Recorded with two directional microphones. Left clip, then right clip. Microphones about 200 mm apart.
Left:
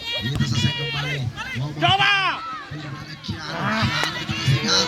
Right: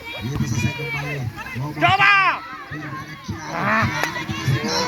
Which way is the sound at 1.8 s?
40° right (ahead or behind).